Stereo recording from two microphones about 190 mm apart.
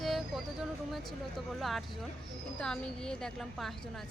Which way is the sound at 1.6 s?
Centre (ahead or behind).